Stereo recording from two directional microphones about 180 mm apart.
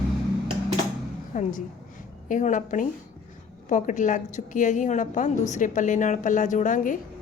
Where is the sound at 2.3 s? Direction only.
45° left (ahead or behind).